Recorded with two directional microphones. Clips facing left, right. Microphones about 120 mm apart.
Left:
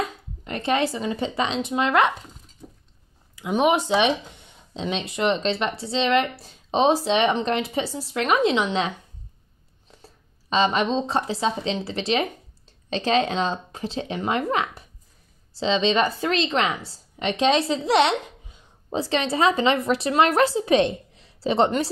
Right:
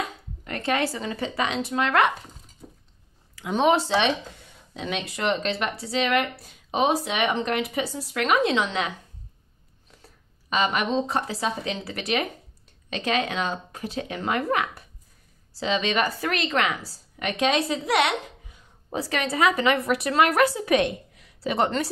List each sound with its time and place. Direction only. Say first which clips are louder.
0.5 s speech: left 2 dB; 20° left (ahead or behind)
3.3 s a woman's voice: left 1 dB; 15° left (ahead or behind)